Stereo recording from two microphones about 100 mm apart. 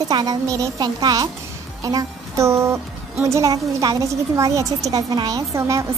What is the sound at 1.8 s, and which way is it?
Music, 35° right (ahead or behind).